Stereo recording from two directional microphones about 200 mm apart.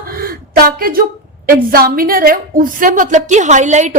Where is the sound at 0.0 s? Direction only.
45° right (ahead or behind).